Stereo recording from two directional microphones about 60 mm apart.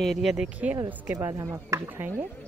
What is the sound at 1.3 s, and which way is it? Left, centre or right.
Speech, right.